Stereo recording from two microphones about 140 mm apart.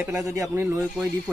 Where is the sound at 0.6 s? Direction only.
10° right (ahead or behind).